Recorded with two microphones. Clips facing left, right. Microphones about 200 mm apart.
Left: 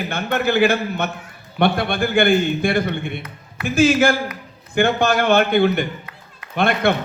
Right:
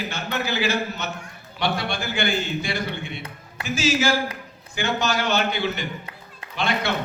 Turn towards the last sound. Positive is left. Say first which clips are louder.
# left 7 dB
turn(degrees=55)  # may be behind; listen again after turning